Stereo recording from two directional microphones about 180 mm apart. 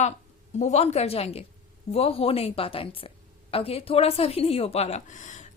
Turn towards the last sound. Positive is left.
turn(degrees=45)  # may be behind; listen again after turning